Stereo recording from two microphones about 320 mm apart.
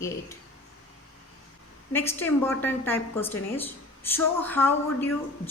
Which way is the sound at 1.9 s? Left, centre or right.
Centre.